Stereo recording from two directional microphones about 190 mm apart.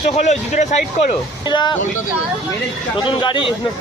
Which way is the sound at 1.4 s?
25° left (ahead or behind).